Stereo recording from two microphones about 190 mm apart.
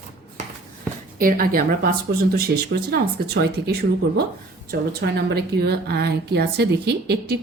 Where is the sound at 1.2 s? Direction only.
50° right (ahead or behind).